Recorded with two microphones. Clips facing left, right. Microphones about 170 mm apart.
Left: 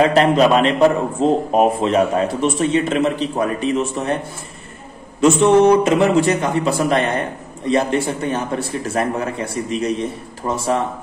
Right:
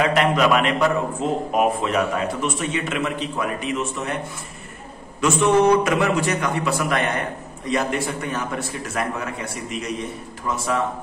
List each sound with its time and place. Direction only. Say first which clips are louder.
0.0 s a man's voice: left 5 dB; 30° left (ahead or behind)
5.2 s a man's voice: left 5 dB; 25° left (ahead or behind)